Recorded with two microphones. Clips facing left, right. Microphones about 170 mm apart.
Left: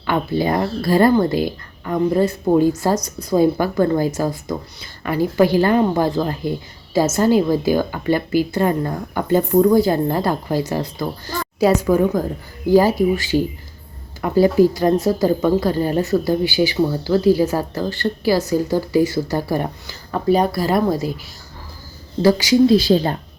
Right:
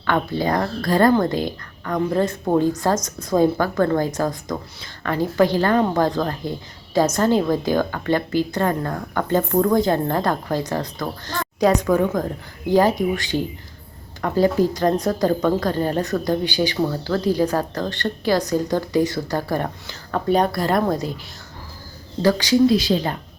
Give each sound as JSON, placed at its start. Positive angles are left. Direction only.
{"t": 0.0, "sound": "a woman's voice", "side_deg": 10}
{"t": 22.2, "sound": "a woman's voice", "side_deg": 10}
{"t": 22.6, "sound": "speech", "side_deg": 30}